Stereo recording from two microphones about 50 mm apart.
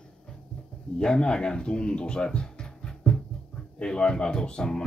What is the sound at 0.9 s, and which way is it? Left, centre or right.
Speech, centre.